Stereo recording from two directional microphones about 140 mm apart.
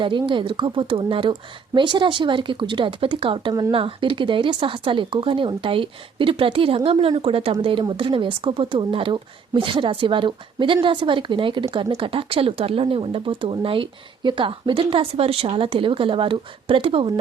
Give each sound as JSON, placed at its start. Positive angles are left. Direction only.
{"t": 0.0, "sound": "speech", "side_deg": -35}
{"t": 3.8, "sound": "speech", "side_deg": -40}